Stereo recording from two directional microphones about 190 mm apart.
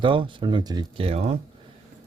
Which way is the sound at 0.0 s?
25° right (ahead or behind).